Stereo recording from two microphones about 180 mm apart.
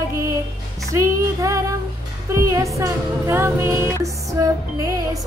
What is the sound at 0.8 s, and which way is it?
Child singing, 15° right (ahead or behind).